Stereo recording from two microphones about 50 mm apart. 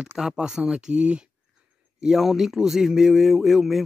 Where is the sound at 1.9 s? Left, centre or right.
Centre.